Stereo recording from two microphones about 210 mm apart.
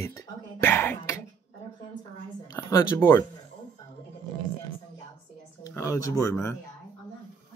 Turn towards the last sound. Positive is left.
turn(degrees=15)  # may be behind; listen again after turning